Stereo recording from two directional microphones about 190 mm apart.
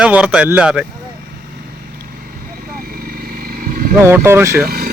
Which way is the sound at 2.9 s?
50° right (ahead or behind).